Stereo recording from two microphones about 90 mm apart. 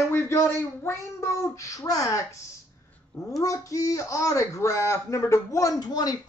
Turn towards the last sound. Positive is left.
turn(degrees=50)  # may be behind; listen again after turning